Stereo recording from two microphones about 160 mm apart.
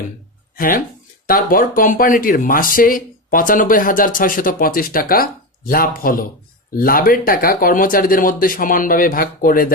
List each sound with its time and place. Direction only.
0.5 s speech: 60° left (ahead or behind)